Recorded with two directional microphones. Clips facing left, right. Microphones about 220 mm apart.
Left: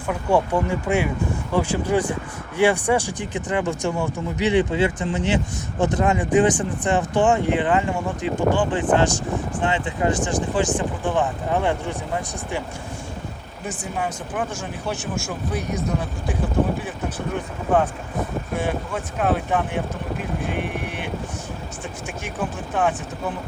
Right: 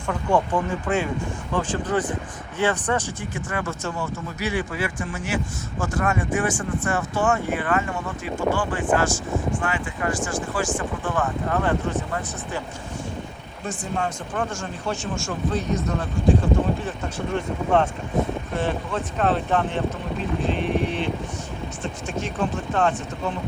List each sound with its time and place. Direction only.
0.1 s speech: 10° left (ahead or behind)
13.7 s speech: 5° left (ahead or behind)
16.4 s speech: centre (ahead or behind)
22.7 s speech: 15° left (ahead or behind)